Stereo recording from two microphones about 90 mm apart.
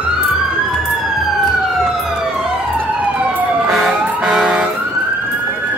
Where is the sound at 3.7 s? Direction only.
5° right (ahead or behind).